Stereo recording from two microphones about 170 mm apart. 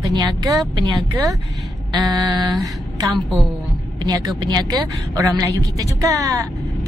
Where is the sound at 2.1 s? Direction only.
25° right (ahead or behind).